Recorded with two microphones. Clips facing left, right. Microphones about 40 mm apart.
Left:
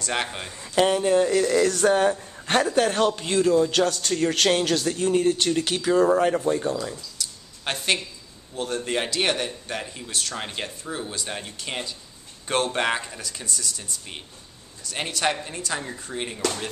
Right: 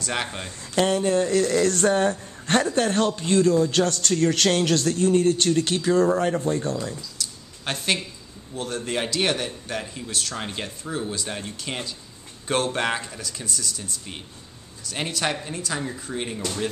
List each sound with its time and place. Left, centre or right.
0.0 s speech: centre
0.7 s speech: centre
6.9 s a sound: centre
8.5 s speech: centre